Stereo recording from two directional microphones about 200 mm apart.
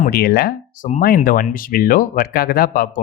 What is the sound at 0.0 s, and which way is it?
Speech, 50° left (ahead or behind).